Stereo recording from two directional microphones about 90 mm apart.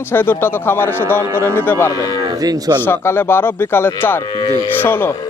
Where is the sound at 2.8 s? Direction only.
25° left (ahead or behind).